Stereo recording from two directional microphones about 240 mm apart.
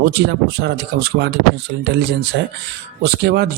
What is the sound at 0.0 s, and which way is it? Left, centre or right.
Speech, right.